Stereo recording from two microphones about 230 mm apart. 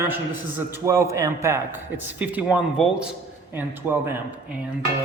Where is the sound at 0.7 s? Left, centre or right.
Centre.